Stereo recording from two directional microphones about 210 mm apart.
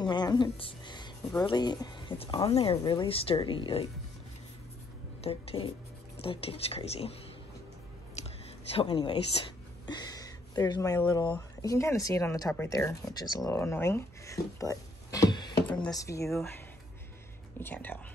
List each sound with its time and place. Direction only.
0.0 s speech: 20° left (ahead or behind)
5.2 s speech: 25° left (ahead or behind)
8.2 s a sound: 30° left (ahead or behind)
8.7 s speech: 20° left (ahead or behind)
17.6 s speech: 10° left (ahead or behind)